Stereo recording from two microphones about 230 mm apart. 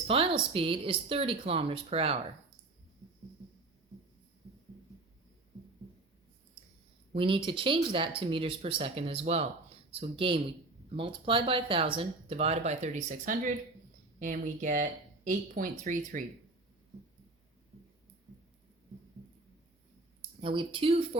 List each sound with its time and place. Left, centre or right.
0.1 s speech: right
7.1 s speech: right
20.4 s speech: right